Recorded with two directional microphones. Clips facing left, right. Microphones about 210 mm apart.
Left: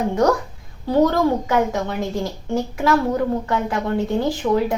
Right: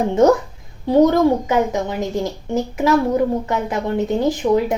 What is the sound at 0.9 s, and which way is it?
A woman's voice, 20° right (ahead or behind).